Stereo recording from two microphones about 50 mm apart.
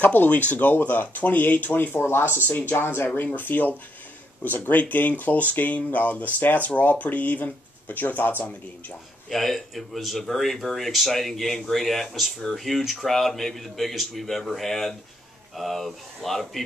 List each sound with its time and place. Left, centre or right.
0.0 s speech: left
9.3 s speech: centre